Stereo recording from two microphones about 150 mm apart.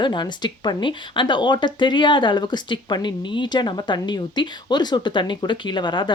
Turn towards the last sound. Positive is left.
turn(degrees=30)  # may be behind; listen again after turning